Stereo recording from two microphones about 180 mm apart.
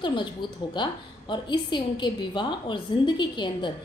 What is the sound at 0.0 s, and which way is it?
A woman's voice, 25° left (ahead or behind).